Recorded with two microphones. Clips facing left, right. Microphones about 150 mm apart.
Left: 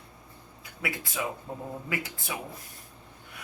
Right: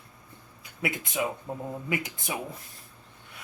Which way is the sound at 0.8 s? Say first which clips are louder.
Right 3 dB; 20° right (ahead or behind).